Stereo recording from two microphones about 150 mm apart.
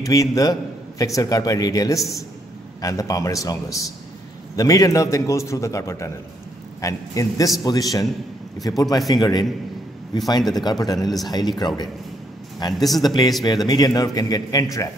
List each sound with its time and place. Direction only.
0.0 s a man's voice: 20° left (ahead or behind)
12.7 s speech: centre (ahead or behind)
13.0 s a man's voice: 25° left (ahead or behind)